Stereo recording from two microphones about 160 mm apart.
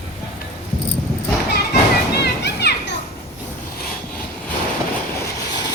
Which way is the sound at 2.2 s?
90° left.